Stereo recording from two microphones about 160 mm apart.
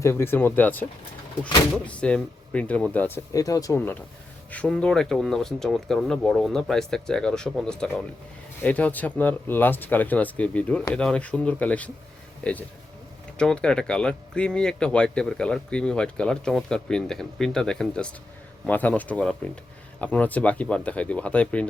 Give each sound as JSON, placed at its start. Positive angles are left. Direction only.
{"t": 0.0, "sound": "speech", "side_deg": 15}
{"t": 3.3, "sound": "speech", "side_deg": 20}